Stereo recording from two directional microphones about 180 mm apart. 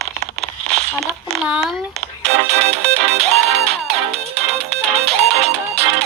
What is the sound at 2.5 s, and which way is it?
Music, 35° right (ahead or behind).